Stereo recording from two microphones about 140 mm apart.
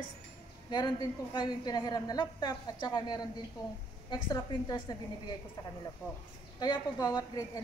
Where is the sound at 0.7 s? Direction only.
30° left (ahead or behind).